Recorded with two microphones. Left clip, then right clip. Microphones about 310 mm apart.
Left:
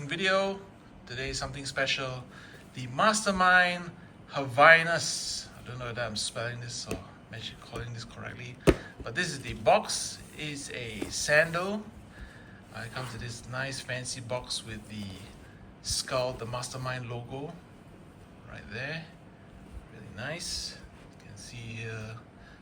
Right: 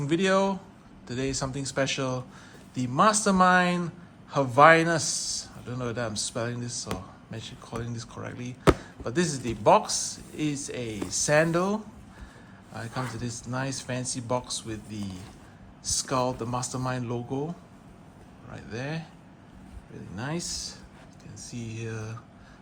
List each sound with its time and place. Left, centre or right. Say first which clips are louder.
0.0 s a man's voice: right 3 dB; centre
18.5 s speech: right 1 dB; centre
20.1 s a man's voice: right 2 dB; centre